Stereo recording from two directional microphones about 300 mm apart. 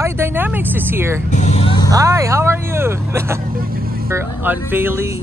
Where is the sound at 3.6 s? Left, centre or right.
Right.